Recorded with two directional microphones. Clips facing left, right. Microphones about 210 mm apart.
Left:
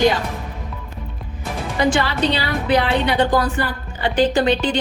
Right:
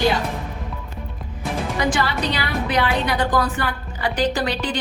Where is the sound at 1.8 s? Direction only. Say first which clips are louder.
Left 5 dB; 25° left (ahead or behind).